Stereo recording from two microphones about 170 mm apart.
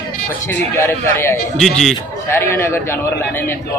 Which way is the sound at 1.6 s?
Centre (ahead or behind).